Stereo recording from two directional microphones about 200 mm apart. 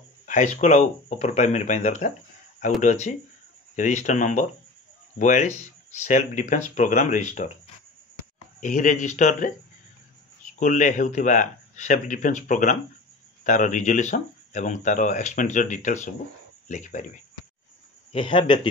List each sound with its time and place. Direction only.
0.6 s speech: 35° left (ahead or behind)
8.5 s speech: 40° left (ahead or behind)
18.1 s a man's voice: 25° left (ahead or behind)